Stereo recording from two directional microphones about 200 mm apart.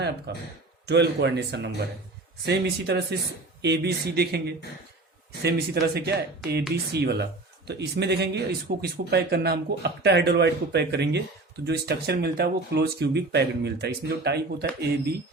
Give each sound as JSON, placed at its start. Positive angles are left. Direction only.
{"t": 0.3, "sound": "speech", "side_deg": -55}